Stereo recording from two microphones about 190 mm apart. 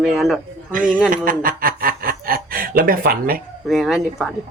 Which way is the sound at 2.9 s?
50° right (ahead or behind).